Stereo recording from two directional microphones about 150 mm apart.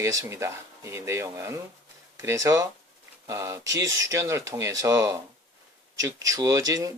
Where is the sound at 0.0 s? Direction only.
20° right (ahead or behind).